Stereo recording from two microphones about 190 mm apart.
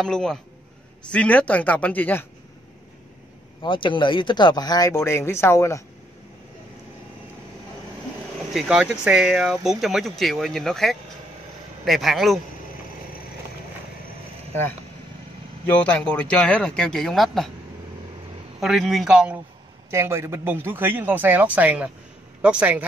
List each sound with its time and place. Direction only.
0.0 s speech: 5° left (ahead or behind)
3.6 s speech: 25° left (ahead or behind)
8.5 s speech: 5° right (ahead or behind)
15.6 s speech: 5° left (ahead or behind)
18.6 s a man's voice: centre (ahead or behind)